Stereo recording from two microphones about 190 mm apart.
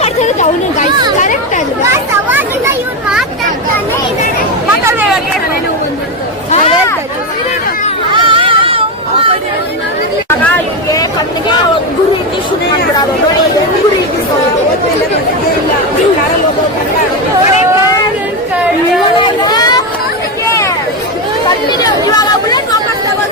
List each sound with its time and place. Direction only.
0.0 s chatter: 40° left (ahead or behind)
1.9 s children playing: 10° right (ahead or behind)
4.9 s chatter: 10° right (ahead or behind)
8.1 s chatter: 25° right (ahead or behind)
19.1 s a sound: 25° left (ahead or behind)
21.4 s chatter: 20° left (ahead or behind)